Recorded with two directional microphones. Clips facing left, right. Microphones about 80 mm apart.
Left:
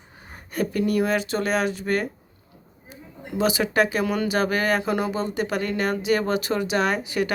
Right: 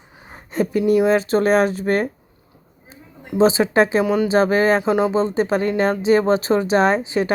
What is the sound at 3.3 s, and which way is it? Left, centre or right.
Speech, right.